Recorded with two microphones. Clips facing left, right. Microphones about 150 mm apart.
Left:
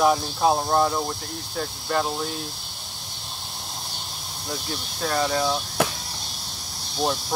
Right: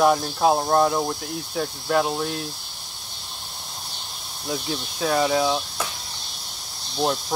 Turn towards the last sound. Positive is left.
turn(degrees=0)  # may be behind; listen again after turning